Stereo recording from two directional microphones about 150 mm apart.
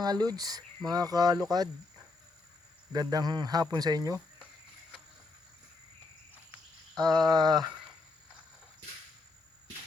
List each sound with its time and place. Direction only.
0.0 s speech: 25° right (ahead or behind)
2.9 s speech: 25° right (ahead or behind)
6.9 s speech: 25° right (ahead or behind)